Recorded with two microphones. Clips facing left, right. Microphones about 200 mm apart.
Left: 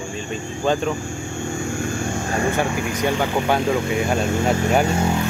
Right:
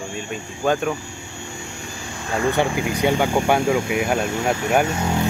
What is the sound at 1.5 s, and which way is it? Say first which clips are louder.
Vehicle: left 10 dB; 50° left (ahead or behind).